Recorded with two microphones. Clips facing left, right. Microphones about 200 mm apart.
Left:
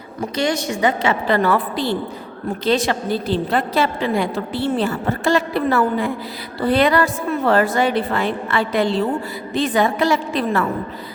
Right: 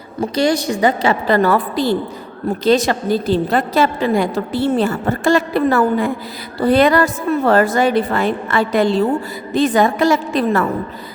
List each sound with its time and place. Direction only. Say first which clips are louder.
0.2 s a woman's voice: right 5 dB; 35° right (ahead or behind)